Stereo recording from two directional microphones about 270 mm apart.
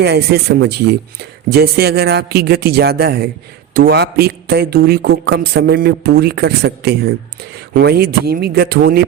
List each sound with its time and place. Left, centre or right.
0.0 s a man's voice: right